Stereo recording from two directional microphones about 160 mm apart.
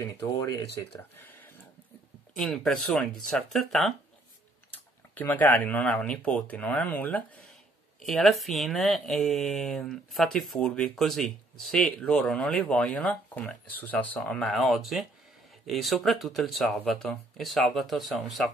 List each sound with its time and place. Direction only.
0.0 s speech: 20° left (ahead or behind)
2.3 s speech: centre (ahead or behind)